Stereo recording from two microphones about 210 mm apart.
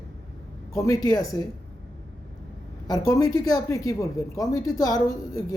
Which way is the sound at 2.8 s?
15° left (ahead or behind).